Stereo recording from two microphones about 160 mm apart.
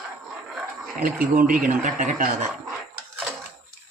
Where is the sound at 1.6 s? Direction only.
55° right (ahead or behind).